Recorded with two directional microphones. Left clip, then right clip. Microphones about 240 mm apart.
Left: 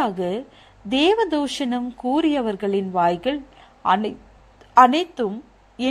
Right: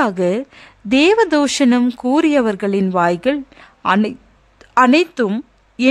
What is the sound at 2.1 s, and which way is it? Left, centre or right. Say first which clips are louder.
A woman's voice: right 5 dB; right.